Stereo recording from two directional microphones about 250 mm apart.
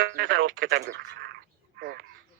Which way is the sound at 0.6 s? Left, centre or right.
Right.